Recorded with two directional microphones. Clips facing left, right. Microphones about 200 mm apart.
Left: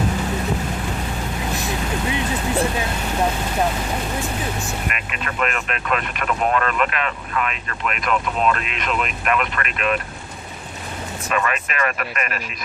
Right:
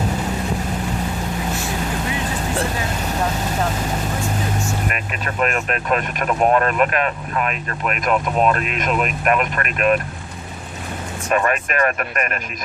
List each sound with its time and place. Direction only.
4.9 s speech: 40° right (ahead or behind)
11.3 s speech: 45° right (ahead or behind)